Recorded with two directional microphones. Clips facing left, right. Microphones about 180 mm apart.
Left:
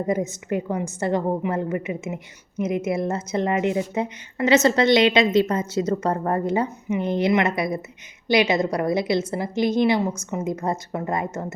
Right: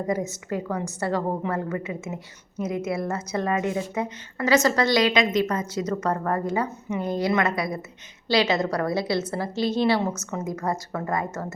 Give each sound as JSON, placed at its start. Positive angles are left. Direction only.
{"t": 0.1, "sound": "a woman's voice", "side_deg": 20}